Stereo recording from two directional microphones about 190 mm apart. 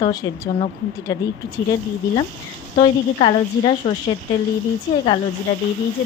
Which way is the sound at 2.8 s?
30° left (ahead or behind).